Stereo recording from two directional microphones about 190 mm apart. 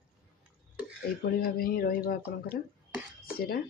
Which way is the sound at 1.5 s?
50° left (ahead or behind).